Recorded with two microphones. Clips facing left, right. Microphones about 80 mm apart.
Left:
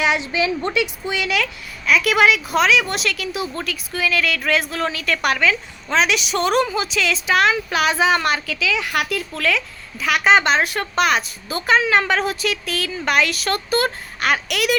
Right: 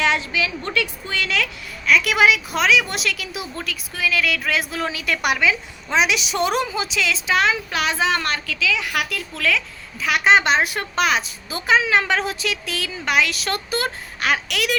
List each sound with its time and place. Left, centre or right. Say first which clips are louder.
0.0 s a sound: left 1 dB; centre
0.3 s a woman's voice: left 4 dB; left
0.7 s speech: left 3 dB; centre
1.9 s a woman's voice: left 1 dB; centre